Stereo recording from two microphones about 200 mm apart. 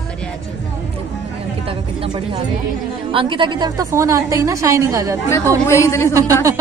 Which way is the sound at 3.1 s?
25° right (ahead or behind).